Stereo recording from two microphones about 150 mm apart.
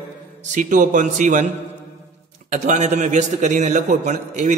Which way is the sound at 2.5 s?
55° right (ahead or behind).